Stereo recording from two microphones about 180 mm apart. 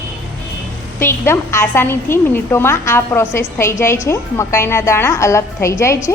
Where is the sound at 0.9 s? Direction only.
15° left (ahead or behind).